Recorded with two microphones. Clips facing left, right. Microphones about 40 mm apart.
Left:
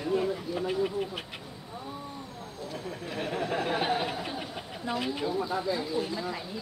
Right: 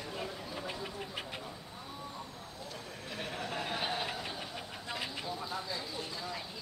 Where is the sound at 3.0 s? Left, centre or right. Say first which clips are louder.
Left 7 dB; centre.